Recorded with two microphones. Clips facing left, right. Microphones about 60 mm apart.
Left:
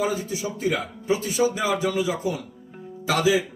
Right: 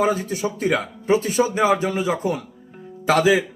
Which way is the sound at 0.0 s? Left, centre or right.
Right.